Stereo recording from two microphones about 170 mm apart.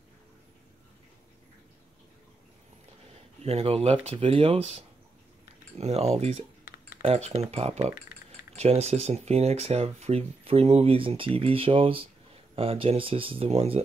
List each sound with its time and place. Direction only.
3.4 s speech: 35° right (ahead or behind)
8.1 s keys jangling: 65° left (ahead or behind)
8.5 s speech: 40° right (ahead or behind)